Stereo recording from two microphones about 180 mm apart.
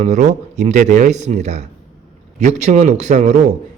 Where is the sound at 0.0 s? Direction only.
40° right (ahead or behind).